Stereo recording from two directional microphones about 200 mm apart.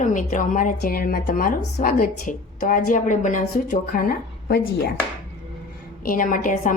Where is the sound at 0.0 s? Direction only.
40° left (ahead or behind).